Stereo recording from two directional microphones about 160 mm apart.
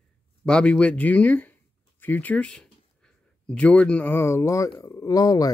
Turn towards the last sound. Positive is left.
turn(degrees=25)  # may be behind; listen again after turning